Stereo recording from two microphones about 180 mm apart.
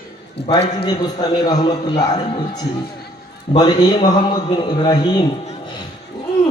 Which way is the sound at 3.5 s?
20° left (ahead or behind).